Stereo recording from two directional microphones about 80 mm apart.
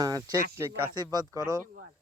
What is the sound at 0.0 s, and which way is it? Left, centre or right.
Speech, right.